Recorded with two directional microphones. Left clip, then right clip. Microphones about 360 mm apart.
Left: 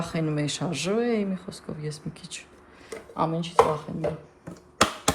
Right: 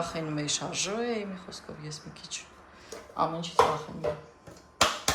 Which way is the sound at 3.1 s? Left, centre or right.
Left.